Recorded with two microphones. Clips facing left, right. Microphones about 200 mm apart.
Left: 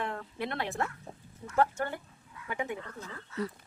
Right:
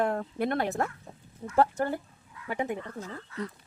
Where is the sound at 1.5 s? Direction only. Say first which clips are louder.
Right 4 dB; 35° right (ahead or behind).